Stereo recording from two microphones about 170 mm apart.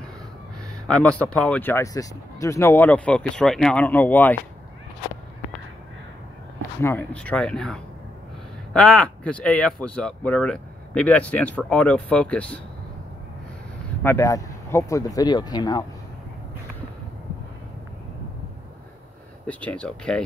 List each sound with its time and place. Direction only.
0.8 s speech: 5° left (ahead or behind)
6.8 s speech: 10° left (ahead or behind)
14.0 s speech: 15° left (ahead or behind)
19.4 s speech: 5° left (ahead or behind)